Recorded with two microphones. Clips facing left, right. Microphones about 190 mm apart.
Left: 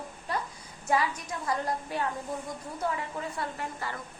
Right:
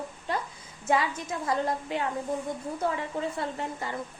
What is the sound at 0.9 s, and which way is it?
A woman's voice, 25° right (ahead or behind).